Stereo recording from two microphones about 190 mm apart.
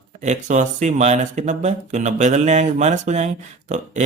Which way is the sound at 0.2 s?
40° right (ahead or behind).